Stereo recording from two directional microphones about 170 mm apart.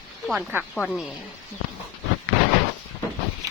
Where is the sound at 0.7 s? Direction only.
Centre (ahead or behind).